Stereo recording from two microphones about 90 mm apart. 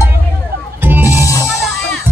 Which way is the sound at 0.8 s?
25° right (ahead or behind).